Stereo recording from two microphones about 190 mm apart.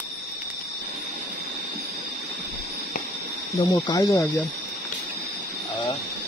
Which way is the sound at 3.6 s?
15° left (ahead or behind).